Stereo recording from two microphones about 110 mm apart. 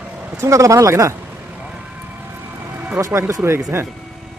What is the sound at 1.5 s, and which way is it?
Vehicle, 10° right (ahead or behind).